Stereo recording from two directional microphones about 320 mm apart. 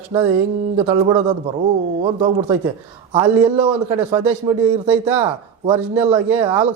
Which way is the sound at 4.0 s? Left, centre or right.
Centre.